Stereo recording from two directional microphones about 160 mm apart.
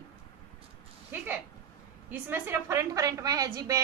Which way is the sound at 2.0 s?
10° right (ahead or behind).